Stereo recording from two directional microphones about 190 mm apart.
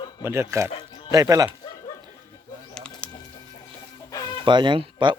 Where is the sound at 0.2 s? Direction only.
15° right (ahead or behind).